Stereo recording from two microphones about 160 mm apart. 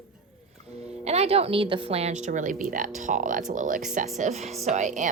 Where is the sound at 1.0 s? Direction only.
40° right (ahead or behind).